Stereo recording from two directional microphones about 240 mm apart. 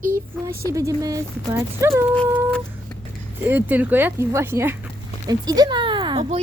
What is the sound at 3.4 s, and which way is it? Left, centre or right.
Speech, centre.